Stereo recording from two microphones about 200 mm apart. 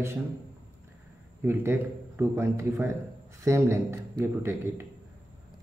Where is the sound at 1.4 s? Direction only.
10° right (ahead or behind).